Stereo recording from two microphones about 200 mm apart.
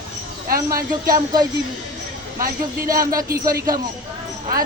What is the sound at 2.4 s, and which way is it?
Speech, 45° right (ahead or behind).